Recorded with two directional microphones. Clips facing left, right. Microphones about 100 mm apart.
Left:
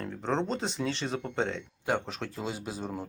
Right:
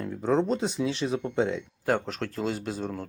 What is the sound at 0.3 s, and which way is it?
Speech, 5° right (ahead or behind).